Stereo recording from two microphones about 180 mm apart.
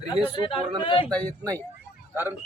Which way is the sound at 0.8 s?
30° left (ahead or behind).